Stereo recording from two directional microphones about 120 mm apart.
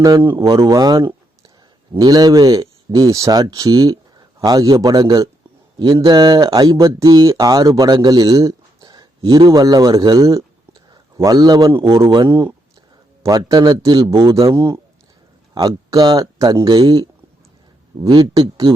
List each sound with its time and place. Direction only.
0.0 s speech: 35° right (ahead or behind)
5.9 s speech: 50° right (ahead or behind)
6.1 s a man's voice: 35° right (ahead or behind)